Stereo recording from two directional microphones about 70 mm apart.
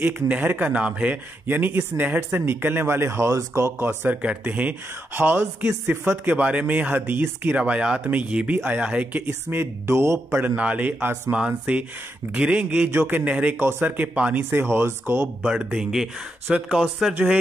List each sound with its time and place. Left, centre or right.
0.0 s speech: right
1.5 s speech: right
4.2 s speech: centre
9.5 s speech: right
10.4 s speech: right
11.3 s speech: centre
14.5 s speech: right
15.4 s speech: centre
16.4 s speech: centre